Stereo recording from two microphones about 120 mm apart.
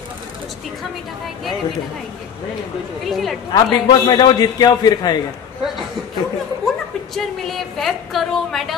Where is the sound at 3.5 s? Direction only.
40° left (ahead or behind).